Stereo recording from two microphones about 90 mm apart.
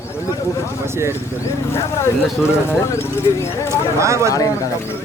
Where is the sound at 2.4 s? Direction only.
30° left (ahead or behind).